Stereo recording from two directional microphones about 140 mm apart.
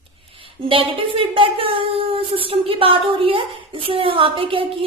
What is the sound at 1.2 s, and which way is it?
Speech, 40° right (ahead or behind).